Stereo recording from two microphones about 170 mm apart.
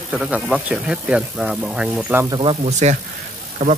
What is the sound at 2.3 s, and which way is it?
Speech, 30° right (ahead or behind).